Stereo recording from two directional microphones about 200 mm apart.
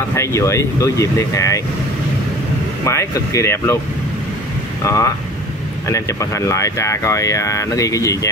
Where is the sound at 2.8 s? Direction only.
15° left (ahead or behind).